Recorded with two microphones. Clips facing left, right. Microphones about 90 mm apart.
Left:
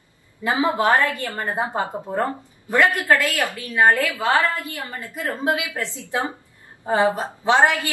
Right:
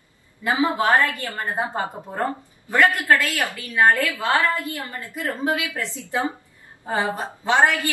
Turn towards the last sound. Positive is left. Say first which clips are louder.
# left 1 dB
turn(degrees=20)  # may be behind; listen again after turning